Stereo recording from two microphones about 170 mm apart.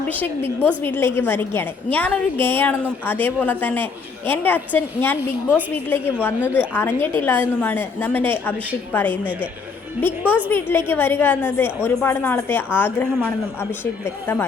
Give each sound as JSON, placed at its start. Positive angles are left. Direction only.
{"t": 0.1, "sound": "a woman's voice", "side_deg": 10}
{"t": 10.5, "sound": "a woman's voice", "side_deg": 15}